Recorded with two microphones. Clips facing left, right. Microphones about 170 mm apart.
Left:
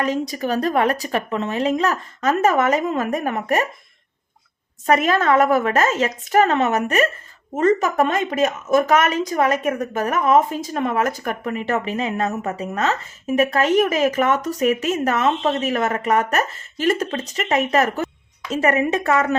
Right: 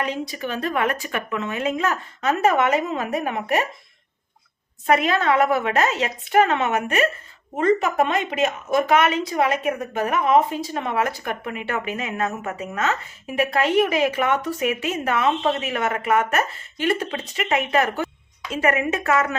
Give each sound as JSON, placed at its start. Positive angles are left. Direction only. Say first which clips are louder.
{"t": 0.0, "sound": "a woman's voice", "louder": "left 5 dB", "side_deg": 40}
{"t": 4.9, "sound": "a woman's voice", "louder": "left 2 dB", "side_deg": 45}